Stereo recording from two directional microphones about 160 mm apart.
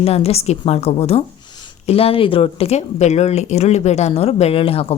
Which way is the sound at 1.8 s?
40° left (ahead or behind).